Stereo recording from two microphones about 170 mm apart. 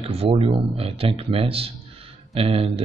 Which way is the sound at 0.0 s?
35° right (ahead or behind).